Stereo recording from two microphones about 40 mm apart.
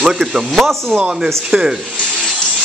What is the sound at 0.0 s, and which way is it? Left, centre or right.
Speech, centre.